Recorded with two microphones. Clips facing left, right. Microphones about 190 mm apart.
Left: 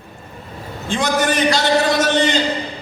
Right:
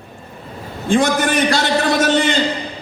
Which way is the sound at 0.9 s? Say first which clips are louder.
Right 3 dB; 50° right (ahead or behind).